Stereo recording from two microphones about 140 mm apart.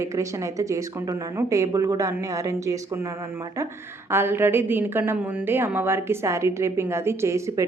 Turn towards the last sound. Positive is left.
turn(degrees=-20)  # may be behind; listen again after turning